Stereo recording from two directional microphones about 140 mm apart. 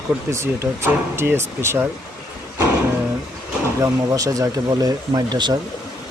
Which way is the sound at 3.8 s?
25° right (ahead or behind).